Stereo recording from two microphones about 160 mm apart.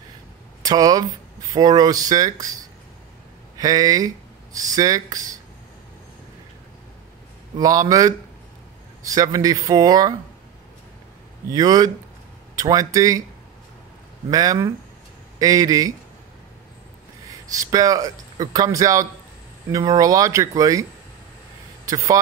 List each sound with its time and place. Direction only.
0.7 s a man's voice: 25° right (ahead or behind)
3.5 s a man's voice: 25° right (ahead or behind)
7.5 s a man's voice: 20° right (ahead or behind)
11.5 s a man's voice: 25° right (ahead or behind)
14.3 s a man's voice: 25° right (ahead or behind)
17.5 s a man's voice: 20° right (ahead or behind)
21.8 s a man's voice: 20° right (ahead or behind)